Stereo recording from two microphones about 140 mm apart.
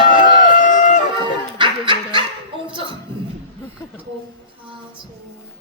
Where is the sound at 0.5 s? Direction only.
65° left (ahead or behind).